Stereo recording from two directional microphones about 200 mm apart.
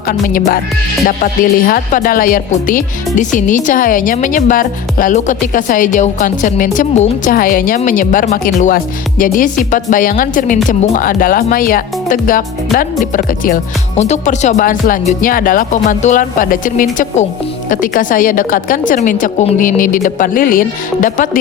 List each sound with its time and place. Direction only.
0.1 s speech: 45° left (ahead or behind)